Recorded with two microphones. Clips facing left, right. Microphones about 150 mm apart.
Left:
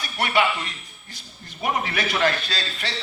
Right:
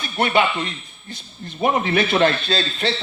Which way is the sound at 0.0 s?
25° right (ahead or behind).